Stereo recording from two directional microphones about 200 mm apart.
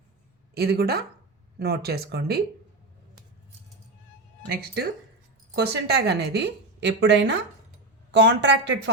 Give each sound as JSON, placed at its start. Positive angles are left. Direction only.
{"t": 0.5, "sound": "speech", "side_deg": -50}
{"t": 4.4, "sound": "a woman's voice", "side_deg": -55}